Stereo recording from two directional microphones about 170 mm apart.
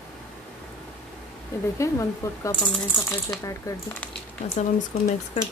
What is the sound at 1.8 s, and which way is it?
Speech, 15° left (ahead or behind).